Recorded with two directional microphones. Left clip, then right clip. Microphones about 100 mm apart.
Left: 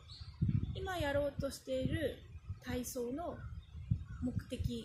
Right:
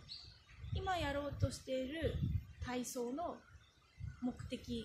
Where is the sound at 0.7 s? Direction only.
20° right (ahead or behind).